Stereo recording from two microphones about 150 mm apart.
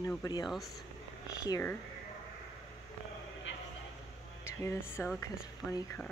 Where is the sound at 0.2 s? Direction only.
25° left (ahead or behind).